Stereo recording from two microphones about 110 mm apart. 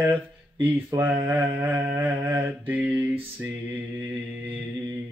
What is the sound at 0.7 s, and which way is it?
Mantra, 20° right (ahead or behind).